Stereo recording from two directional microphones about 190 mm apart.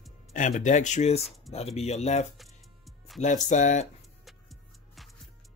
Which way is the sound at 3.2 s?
40° left (ahead or behind).